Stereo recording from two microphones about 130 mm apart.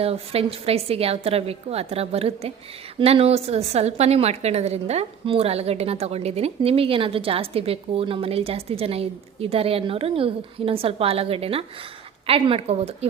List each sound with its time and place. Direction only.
0.0 s a woman's voice: 50° right (ahead or behind)